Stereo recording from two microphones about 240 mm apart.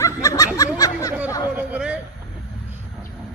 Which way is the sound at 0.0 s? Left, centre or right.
Centre.